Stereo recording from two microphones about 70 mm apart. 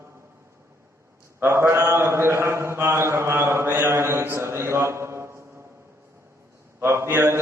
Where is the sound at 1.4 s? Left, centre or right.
Right.